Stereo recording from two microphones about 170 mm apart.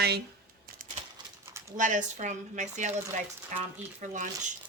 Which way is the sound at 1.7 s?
45° right (ahead or behind).